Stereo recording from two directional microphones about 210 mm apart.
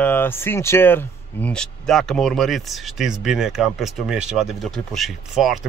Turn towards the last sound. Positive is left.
turn(degrees=0)  # may be behind; listen again after turning